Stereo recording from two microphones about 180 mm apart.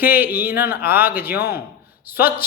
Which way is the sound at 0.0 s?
10° right (ahead or behind).